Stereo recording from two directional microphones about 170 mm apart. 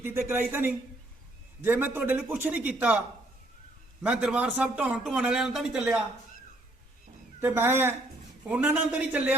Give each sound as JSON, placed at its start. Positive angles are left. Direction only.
{"t": 0.0, "sound": "a man's voice", "side_deg": -15}
{"t": 4.0, "sound": "speech", "side_deg": -5}
{"t": 7.4, "sound": "a man's voice", "side_deg": -15}